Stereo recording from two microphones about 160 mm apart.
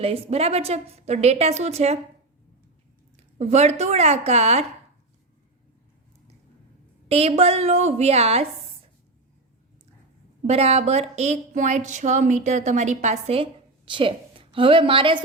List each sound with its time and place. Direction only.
0.0 s a woman's voice: 35° right (ahead or behind)
3.3 s speech: 45° right (ahead or behind)
7.1 s a woman's voice: 40° right (ahead or behind)
10.4 s speech: 40° right (ahead or behind)